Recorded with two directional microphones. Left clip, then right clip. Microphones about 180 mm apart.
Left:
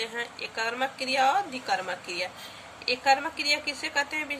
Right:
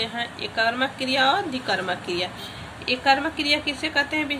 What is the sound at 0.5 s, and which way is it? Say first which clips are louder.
Speech: right 7 dB; 20° left (ahead or behind).